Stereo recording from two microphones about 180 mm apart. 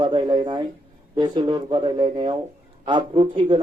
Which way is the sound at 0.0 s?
25° right (ahead or behind).